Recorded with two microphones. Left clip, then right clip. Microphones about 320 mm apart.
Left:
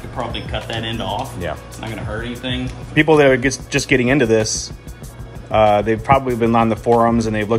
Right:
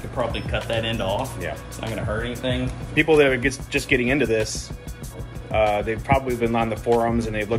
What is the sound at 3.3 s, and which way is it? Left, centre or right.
Speech, left.